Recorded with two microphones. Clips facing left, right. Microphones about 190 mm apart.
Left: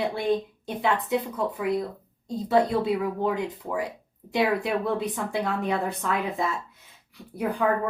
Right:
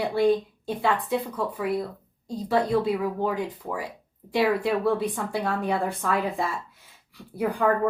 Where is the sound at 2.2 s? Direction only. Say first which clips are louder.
Left 2 dB; 20° left (ahead or behind).